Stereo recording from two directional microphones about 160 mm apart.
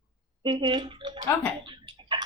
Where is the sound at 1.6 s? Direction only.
30° right (ahead or behind).